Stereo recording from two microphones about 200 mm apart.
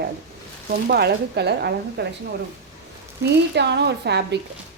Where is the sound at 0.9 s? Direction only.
55° right (ahead or behind).